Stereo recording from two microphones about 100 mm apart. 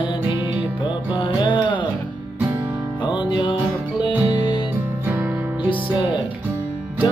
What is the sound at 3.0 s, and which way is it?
Music, 50° left (ahead or behind).